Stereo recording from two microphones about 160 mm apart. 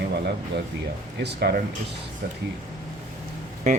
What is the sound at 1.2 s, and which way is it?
Speech, 75° right (ahead or behind).